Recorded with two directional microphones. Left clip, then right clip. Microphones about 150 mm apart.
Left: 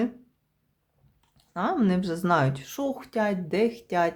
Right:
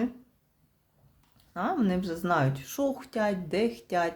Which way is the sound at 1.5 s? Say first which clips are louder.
Left 3 dB; 20° left (ahead or behind).